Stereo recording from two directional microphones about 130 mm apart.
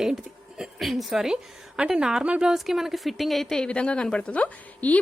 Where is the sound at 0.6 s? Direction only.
Centre (ahead or behind).